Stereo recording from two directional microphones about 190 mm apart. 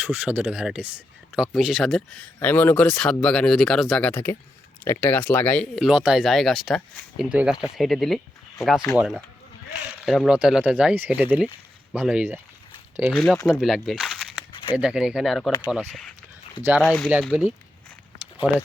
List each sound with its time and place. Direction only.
0.0 s speech: 10° right (ahead or behind)
14.5 s a sound: 25° left (ahead or behind)
14.8 s speech: 5° right (ahead or behind)